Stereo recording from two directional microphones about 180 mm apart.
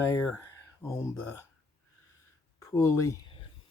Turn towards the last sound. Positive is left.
turn(degrees=15)  # may be behind; listen again after turning